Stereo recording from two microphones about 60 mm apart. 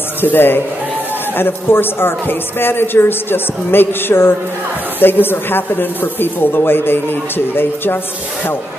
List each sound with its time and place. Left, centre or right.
0.2 s a man's voice: left